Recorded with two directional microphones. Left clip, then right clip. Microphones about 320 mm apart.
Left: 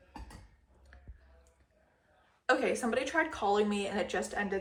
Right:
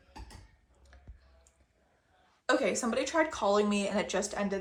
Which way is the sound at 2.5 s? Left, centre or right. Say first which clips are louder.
Even; centre.